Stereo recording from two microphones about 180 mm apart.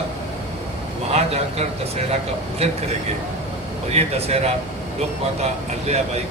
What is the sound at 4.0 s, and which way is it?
Speech, 35° right (ahead or behind).